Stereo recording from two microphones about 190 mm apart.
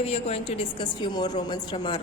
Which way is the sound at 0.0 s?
30° left (ahead or behind).